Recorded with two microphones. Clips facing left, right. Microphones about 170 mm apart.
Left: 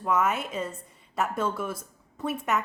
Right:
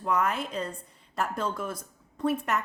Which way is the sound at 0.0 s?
5° left (ahead or behind).